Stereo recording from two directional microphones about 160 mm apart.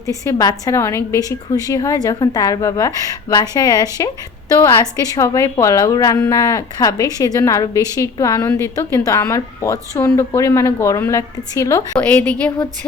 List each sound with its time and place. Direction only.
0.3 s a woman's voice: 20° left (ahead or behind)